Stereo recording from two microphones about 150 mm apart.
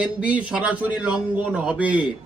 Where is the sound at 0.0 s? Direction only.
10° right (ahead or behind).